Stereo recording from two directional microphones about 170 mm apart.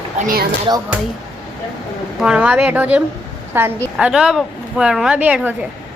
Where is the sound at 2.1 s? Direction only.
5° right (ahead or behind).